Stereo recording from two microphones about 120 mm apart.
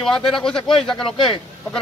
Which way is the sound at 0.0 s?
5° left (ahead or behind).